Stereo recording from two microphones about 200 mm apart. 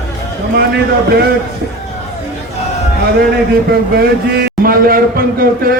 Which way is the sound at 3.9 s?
50° right (ahead or behind).